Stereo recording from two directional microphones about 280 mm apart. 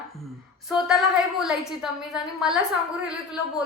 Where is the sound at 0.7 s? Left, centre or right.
Centre.